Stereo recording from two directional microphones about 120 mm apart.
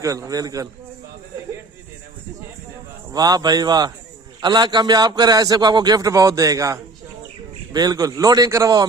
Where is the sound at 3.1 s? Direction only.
35° right (ahead or behind).